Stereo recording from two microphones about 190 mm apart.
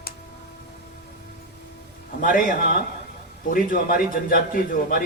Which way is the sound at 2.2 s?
45° left (ahead or behind).